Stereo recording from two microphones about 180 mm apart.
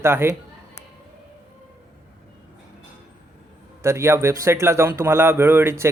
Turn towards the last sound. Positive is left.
turn(degrees=-15)  # may be behind; listen again after turning